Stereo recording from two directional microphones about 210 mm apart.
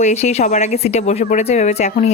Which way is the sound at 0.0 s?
30° left (ahead or behind).